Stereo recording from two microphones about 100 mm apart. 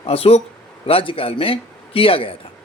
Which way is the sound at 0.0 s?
75° left (ahead or behind).